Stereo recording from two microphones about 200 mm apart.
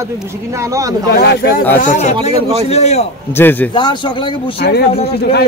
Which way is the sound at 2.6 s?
30° left (ahead or behind).